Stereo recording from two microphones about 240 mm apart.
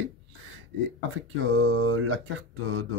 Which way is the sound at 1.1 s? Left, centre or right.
Right.